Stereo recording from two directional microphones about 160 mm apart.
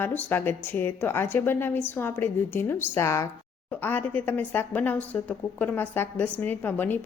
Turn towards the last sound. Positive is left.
turn(degrees=10)  # may be behind; listen again after turning